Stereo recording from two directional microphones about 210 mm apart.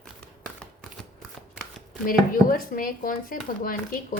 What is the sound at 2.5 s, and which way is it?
Speech, 40° left (ahead or behind).